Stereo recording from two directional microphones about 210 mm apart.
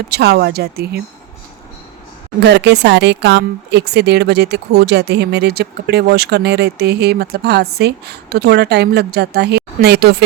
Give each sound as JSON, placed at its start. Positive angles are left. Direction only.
{"t": 0.1, "sound": "speech", "side_deg": -50}
{"t": 2.4, "sound": "speech", "side_deg": -55}